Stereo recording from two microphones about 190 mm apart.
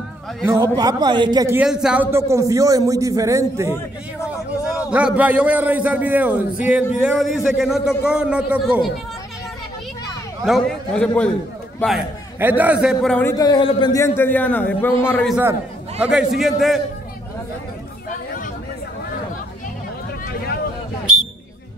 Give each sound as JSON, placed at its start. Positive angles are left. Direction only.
{"t": 0.5, "sound": "a man's voice", "side_deg": -20}
{"t": 1.6, "sound": "a man's voice", "side_deg": -5}
{"t": 4.9, "sound": "a man's voice", "side_deg": -5}
{"t": 10.4, "sound": "a man's voice", "side_deg": 0}
{"t": 12.4, "sound": "a man's voice", "side_deg": -10}
{"t": 13.2, "sound": "a man's voice", "side_deg": 20}
{"t": 16.0, "sound": "a man's voice", "side_deg": -5}